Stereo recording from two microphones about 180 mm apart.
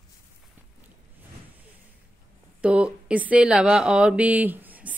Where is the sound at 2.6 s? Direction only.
5° right (ahead or behind).